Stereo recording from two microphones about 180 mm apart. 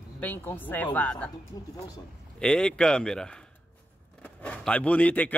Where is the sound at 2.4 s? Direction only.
5° left (ahead or behind).